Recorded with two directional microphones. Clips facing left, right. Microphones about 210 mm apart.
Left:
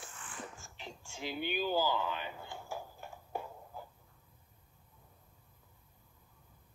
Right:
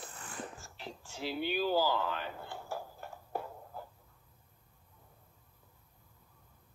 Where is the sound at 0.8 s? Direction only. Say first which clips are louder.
Right 3 dB; 5° right (ahead or behind).